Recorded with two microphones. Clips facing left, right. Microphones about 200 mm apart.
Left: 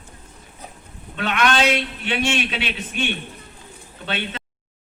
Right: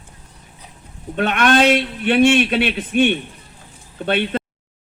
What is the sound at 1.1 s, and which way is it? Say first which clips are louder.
A man's voice: right 5 dB; 50° right (ahead or behind).